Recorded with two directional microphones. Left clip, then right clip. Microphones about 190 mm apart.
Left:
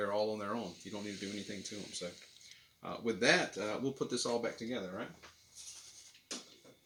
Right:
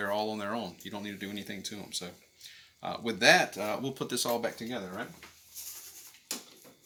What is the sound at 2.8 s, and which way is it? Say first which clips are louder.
Speech: right 5 dB; 30° right (ahead or behind).